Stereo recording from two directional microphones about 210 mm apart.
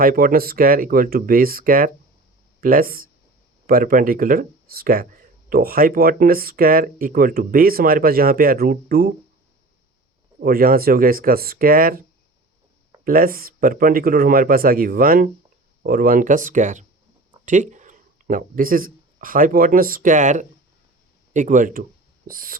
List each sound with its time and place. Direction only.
0.0 s speech: 45° right (ahead or behind)
10.4 s speech: 45° right (ahead or behind)
13.1 s speech: 45° right (ahead or behind)